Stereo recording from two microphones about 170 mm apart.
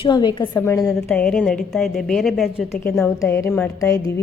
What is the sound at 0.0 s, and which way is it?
Speech, 25° left (ahead or behind).